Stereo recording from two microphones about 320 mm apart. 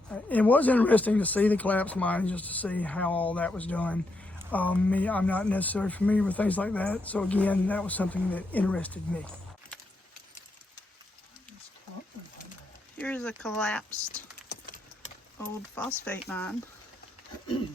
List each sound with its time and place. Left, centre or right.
0.1 s speech: centre
13.0 s speech: centre
14.5 s clip-clop: left
15.4 s speech: centre